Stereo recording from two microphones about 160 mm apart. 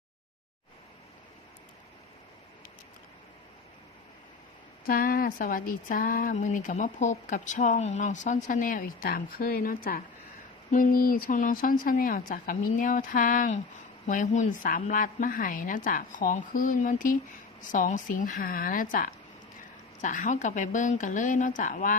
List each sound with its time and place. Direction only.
4.9 s speech: 65° left (ahead or behind)